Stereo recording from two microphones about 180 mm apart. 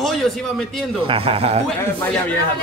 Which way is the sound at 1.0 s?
30° right (ahead or behind).